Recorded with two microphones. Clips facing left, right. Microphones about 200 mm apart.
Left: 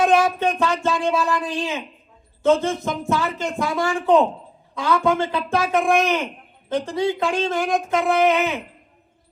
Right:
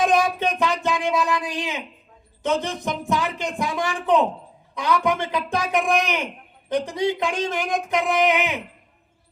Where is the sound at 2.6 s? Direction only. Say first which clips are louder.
Left 3 dB; 15° right (ahead or behind).